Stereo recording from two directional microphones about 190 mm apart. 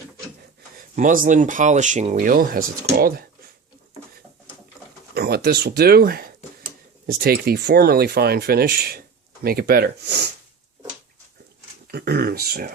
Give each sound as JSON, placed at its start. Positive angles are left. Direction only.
{"t": 0.8, "sound": "speech", "side_deg": -45}
{"t": 3.0, "sound": "a sound", "side_deg": -50}
{"t": 5.1, "sound": "speech", "side_deg": -55}
{"t": 11.9, "sound": "speech", "side_deg": -55}